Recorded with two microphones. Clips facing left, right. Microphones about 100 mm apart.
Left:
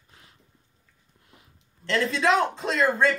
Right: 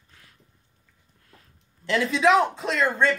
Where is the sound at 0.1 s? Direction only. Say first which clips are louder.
Left 1 dB; 25° left (ahead or behind).